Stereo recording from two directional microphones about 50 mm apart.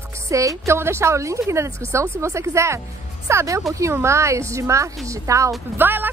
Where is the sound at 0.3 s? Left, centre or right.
Right.